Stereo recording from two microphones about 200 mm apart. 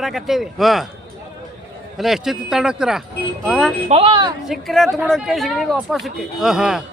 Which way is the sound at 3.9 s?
25° right (ahead or behind).